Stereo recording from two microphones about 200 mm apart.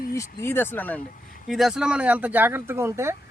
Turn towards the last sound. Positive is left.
turn(degrees=-15)  # may be behind; listen again after turning